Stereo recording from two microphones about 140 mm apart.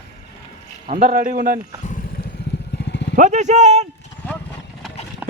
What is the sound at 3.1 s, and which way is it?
Speech, 60° right (ahead or behind).